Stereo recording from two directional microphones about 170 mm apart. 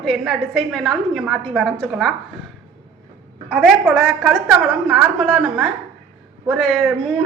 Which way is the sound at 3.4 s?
5° right (ahead or behind).